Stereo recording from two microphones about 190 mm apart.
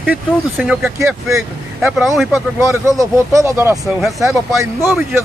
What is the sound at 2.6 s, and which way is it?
Speech, 15° right (ahead or behind).